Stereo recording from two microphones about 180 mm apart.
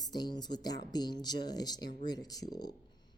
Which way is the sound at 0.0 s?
20° left (ahead or behind).